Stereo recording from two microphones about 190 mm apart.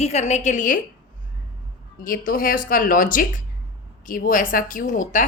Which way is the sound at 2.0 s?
50° left (ahead or behind).